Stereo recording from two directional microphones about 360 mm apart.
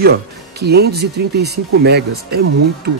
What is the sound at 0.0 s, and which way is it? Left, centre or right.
Speech, right.